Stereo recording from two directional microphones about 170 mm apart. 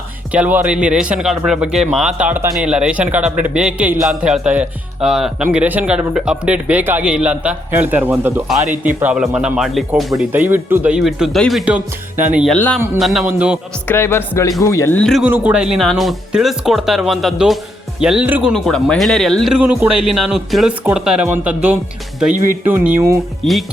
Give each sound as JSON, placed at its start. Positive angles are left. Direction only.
{"t": 0.3, "sound": "speech", "side_deg": -10}
{"t": 12.5, "sound": "music", "side_deg": 10}
{"t": 13.0, "sound": "speech", "side_deg": 0}
{"t": 13.8, "sound": "music", "side_deg": 15}
{"t": 15.0, "sound": "speech", "side_deg": 0}
{"t": 18.5, "sound": "speech", "side_deg": 5}
{"t": 23.4, "sound": "speech", "side_deg": 0}